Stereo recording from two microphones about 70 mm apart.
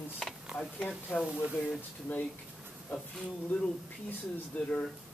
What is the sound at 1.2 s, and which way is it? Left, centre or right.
Speech, centre.